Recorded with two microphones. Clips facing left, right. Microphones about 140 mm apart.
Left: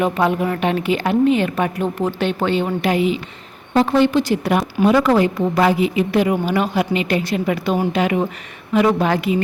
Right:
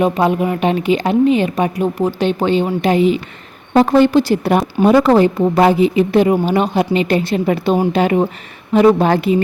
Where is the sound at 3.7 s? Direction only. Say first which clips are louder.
Right 4 dB; 45° right (ahead or behind).